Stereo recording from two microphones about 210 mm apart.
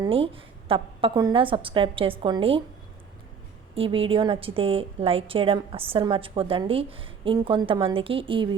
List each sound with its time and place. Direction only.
0.0 s a woman's voice: 25° right (ahead or behind)
3.8 s a woman's voice: 25° right (ahead or behind)